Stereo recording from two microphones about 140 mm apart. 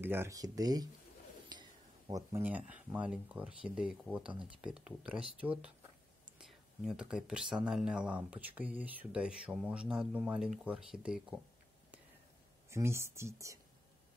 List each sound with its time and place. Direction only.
0.0 s speech: 15° right (ahead or behind)
1.5 s a sound: 30° right (ahead or behind)
2.3 s speech: 10° right (ahead or behind)
12.6 s speech: 20° right (ahead or behind)